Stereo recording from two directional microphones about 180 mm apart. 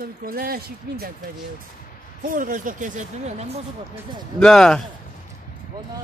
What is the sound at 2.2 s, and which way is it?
Speech, 50° right (ahead or behind).